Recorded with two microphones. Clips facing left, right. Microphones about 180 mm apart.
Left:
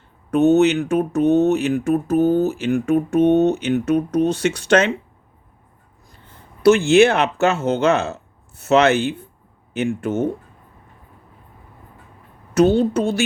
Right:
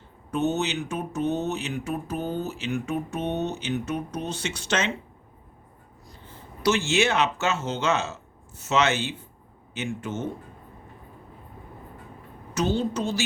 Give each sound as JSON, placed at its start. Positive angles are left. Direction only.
{"t": 0.3, "sound": "speech", "side_deg": 60}
{"t": 6.6, "sound": "speech", "side_deg": 55}
{"t": 12.5, "sound": "speech", "side_deg": 60}